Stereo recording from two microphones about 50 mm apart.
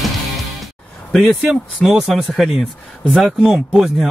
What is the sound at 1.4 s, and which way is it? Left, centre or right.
Speech, centre.